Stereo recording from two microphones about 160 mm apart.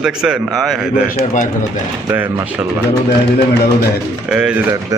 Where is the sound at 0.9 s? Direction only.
55° left (ahead or behind).